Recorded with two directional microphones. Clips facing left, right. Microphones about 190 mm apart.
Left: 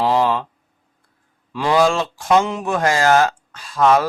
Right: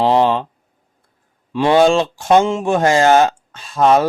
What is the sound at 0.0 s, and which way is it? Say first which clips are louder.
Speech: right 3 dB; 25° right (ahead or behind).